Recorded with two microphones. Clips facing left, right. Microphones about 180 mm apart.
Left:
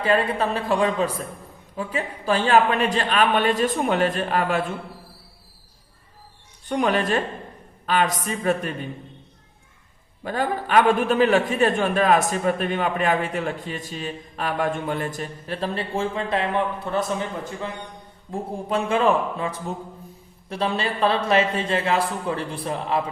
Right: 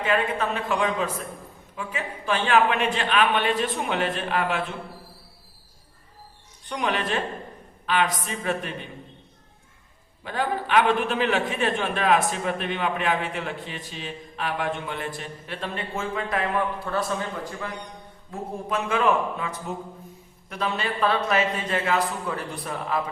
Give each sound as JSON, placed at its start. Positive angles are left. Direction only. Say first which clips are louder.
{"t": 0.0, "sound": "a man's voice", "louder": "left 3 dB", "side_deg": 35}
{"t": 6.7, "sound": "a man's voice", "louder": "left 5 dB", "side_deg": 45}
{"t": 10.2, "sound": "a man's voice", "louder": "left 2 dB", "side_deg": 40}